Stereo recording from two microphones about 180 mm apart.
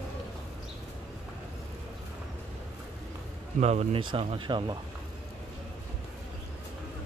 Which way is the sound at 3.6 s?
35° right (ahead or behind).